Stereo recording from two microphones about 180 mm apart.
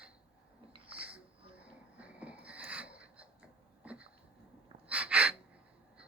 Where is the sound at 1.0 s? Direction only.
10° right (ahead or behind).